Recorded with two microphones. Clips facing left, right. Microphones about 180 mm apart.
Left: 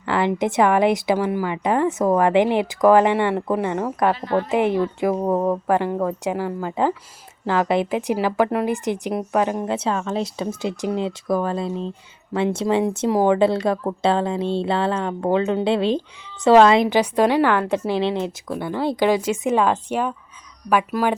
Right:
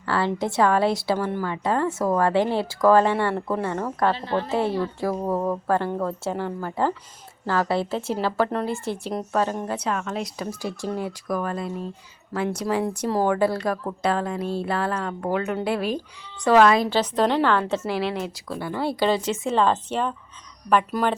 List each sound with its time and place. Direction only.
0.0 s a woman's voice: 15° left (ahead or behind)
4.1 s a woman's voice: 30° right (ahead or behind)
4.5 s a woman's voice: 20° left (ahead or behind)
9.7 s a woman's voice: 25° left (ahead or behind)
17.8 s a woman's voice: 20° left (ahead or behind)